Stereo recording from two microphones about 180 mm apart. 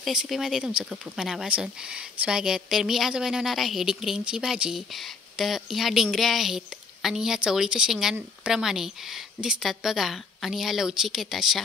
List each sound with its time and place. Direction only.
0.0 s speech: centre (ahead or behind)